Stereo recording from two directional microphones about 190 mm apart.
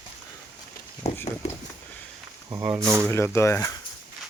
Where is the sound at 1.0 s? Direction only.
35° left (ahead or behind).